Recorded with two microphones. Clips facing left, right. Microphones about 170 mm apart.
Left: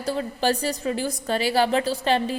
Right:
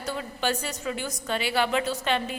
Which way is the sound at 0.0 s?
35° left (ahead or behind).